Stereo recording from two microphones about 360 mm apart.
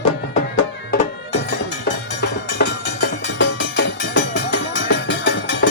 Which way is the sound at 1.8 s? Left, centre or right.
Left.